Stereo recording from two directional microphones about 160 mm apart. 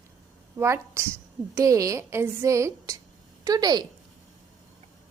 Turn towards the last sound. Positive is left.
turn(degrees=-25)  # may be behind; listen again after turning